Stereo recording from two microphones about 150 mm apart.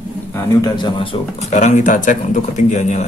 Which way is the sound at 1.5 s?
55° left (ahead or behind).